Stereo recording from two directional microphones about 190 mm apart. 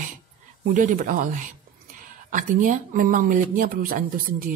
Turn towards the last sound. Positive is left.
turn(degrees=-45)  # may be behind; listen again after turning